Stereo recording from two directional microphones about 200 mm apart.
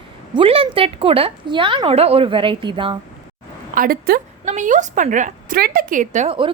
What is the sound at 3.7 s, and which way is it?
A woman's voice, 45° right (ahead or behind).